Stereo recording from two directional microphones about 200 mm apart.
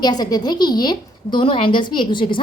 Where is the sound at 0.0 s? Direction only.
20° left (ahead or behind).